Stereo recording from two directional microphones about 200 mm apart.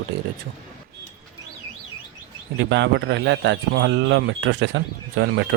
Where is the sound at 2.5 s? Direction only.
60° right (ahead or behind).